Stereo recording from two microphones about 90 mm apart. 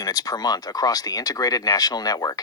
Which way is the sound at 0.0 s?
45° left (ahead or behind).